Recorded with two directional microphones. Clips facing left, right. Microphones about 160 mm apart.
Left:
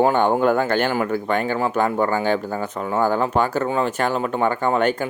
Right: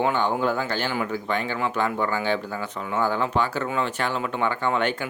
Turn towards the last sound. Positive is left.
turn(degrees=45)  # may be behind; listen again after turning